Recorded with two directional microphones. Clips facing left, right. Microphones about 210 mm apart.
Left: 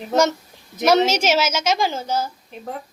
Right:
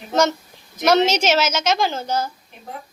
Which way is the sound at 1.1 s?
10° left (ahead or behind).